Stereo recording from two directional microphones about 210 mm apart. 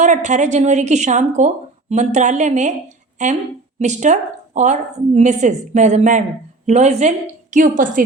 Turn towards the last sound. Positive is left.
turn(degrees=-40)  # may be behind; listen again after turning